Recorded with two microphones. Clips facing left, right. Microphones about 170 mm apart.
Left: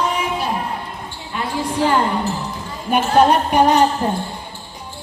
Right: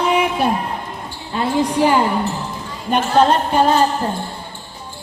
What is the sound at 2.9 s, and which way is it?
Speech, 10° left (ahead or behind).